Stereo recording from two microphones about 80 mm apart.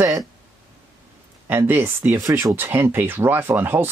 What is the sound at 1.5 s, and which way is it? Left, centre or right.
Speech, right.